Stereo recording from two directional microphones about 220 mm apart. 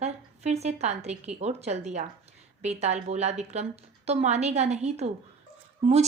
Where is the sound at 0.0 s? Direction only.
30° right (ahead or behind).